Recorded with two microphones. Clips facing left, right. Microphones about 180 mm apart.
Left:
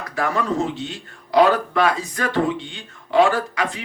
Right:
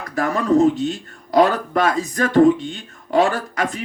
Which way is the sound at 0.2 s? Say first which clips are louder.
Right 6 dB; 45° right (ahead or behind).